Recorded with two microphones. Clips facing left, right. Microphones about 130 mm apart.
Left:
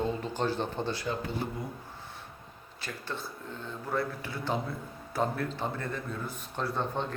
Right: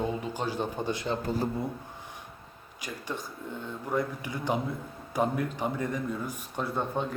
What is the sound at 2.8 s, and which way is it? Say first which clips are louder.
A man's voice: right 2 dB; 15° right (ahead or behind).